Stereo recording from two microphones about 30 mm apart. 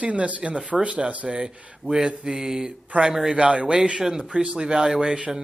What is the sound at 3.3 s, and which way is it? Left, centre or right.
Speech, right.